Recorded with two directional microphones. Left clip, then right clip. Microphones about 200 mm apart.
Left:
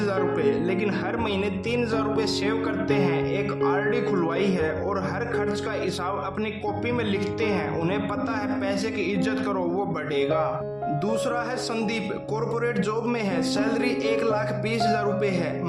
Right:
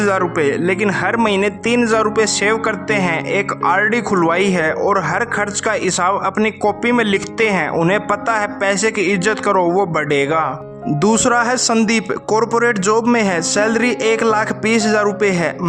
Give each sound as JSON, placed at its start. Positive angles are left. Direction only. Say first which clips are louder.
{"t": 0.0, "sound": "speech", "louder": "right 8 dB", "side_deg": -45}